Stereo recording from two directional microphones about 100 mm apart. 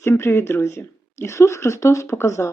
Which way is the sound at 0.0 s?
25° left (ahead or behind).